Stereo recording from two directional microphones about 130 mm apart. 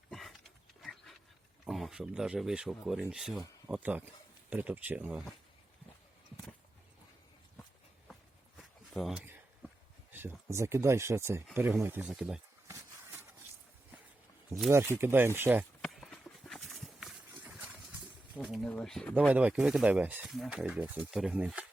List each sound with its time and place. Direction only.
0.1 s a sound: centre (ahead or behind)
1.6 s speech: centre (ahead or behind)
8.5 s a sound: centre (ahead or behind)
10.1 s speech: 15° right (ahead or behind)
12.0 s speech: 5° right (ahead or behind)
12.6 s a sound: 20° right (ahead or behind)
14.5 s speech: 25° right (ahead or behind)
15.8 s horse: 5° left (ahead or behind)
18.4 s speech: 5° right (ahead or behind)
18.7 s speech: 5° left (ahead or behind)
19.3 s speech: 10° right (ahead or behind)